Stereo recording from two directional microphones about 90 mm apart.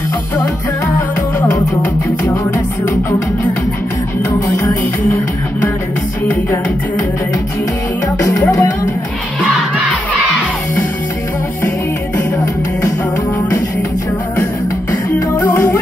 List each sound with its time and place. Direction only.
2.2 s music: 35° left (ahead or behind)
8.3 s music: 35° left (ahead or behind)
15.4 s music: 25° left (ahead or behind)